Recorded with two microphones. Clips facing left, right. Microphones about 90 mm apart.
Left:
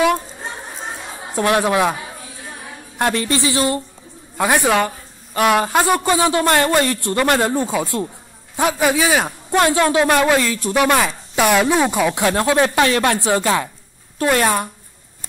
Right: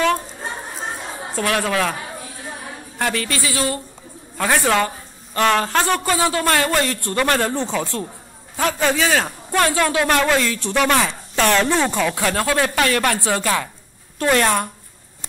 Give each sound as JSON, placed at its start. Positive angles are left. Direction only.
{"t": 1.3, "sound": "a man's voice", "side_deg": 20}
{"t": 3.0, "sound": "a woman's voice", "side_deg": 20}
{"t": 14.2, "sound": "a man's voice", "side_deg": 10}